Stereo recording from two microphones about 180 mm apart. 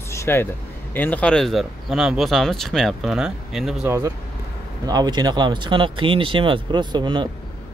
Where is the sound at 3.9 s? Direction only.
15° right (ahead or behind).